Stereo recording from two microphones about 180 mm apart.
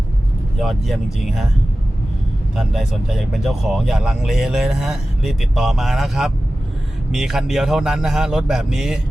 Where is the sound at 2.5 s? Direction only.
Centre (ahead or behind).